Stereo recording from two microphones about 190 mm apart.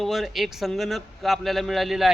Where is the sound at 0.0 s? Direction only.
Centre (ahead or behind).